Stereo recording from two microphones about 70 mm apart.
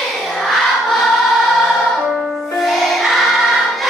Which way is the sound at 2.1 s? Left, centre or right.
Centre.